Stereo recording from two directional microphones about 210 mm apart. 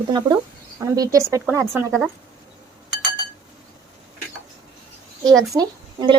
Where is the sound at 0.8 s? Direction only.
15° right (ahead or behind).